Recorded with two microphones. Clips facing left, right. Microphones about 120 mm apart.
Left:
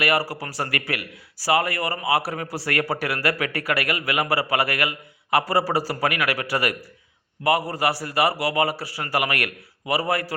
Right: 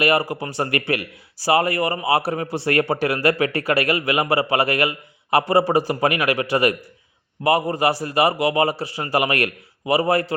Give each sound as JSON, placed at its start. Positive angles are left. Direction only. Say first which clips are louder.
{"t": 0.0, "sound": "speech", "louder": "right 4 dB", "side_deg": -20}